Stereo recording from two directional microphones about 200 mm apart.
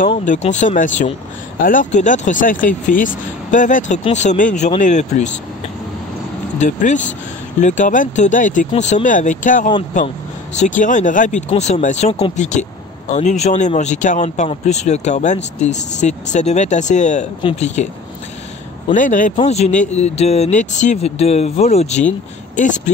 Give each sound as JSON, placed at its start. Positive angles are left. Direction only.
{"t": 0.2, "sound": "speech", "side_deg": 35}
{"t": 6.6, "sound": "speech", "side_deg": 35}
{"t": 18.9, "sound": "speech", "side_deg": 40}